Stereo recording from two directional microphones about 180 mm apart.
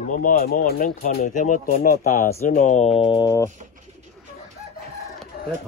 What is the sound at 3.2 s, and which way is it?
Speech, 15° left (ahead or behind).